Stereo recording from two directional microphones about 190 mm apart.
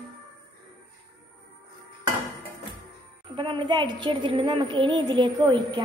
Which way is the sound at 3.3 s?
25° right (ahead or behind).